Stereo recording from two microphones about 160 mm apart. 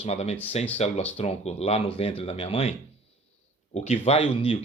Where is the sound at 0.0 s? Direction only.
45° left (ahead or behind).